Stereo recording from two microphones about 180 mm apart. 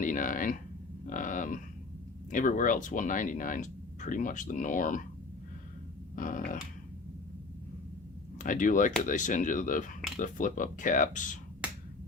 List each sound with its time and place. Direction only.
0.0 s speech: 45° left (ahead or behind)
6.1 s speech: 50° left (ahead or behind)
8.4 s speech: 45° left (ahead or behind)